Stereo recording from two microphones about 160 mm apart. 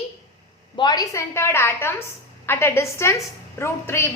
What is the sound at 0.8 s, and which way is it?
A woman's voice, 25° left (ahead or behind).